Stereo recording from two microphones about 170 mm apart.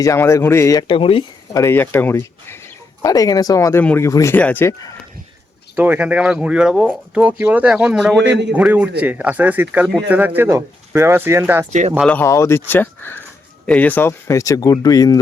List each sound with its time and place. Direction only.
0.0 s speech: 15° left (ahead or behind)
1.5 s speech: 15° left (ahead or behind)
5.7 s speech: 10° right (ahead or behind)
12.0 s speech: 10° left (ahead or behind)